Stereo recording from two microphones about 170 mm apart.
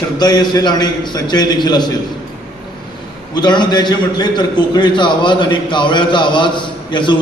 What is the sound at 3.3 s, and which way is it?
A man's voice, 25° left (ahead or behind).